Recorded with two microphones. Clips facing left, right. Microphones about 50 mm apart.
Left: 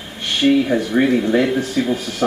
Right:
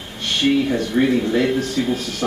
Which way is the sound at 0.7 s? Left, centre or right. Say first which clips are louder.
Left 2 dB; centre.